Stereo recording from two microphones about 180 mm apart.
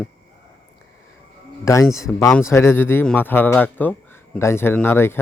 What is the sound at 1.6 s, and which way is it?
Speech, 15° left (ahead or behind).